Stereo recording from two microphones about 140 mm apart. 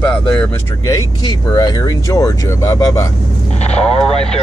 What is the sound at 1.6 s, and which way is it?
Speech, 30° left (ahead or behind).